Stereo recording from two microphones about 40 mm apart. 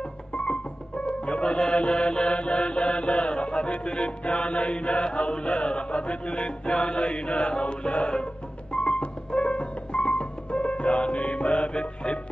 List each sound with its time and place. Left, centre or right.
0.3 s music: left